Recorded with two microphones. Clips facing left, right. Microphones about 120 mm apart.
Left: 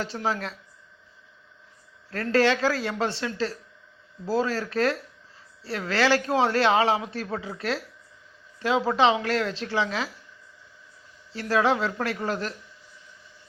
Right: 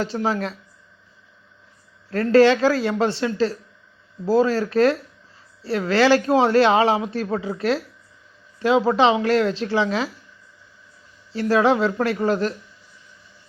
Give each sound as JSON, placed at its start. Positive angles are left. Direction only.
{"t": 0.2, "sound": "speech", "side_deg": -25}
{"t": 2.0, "sound": "speech", "side_deg": -25}
{"t": 7.3, "sound": "speech", "side_deg": -35}
{"t": 8.5, "sound": "a sound", "side_deg": -20}
{"t": 9.0, "sound": "speech", "side_deg": -20}
{"t": 11.3, "sound": "speech", "side_deg": -25}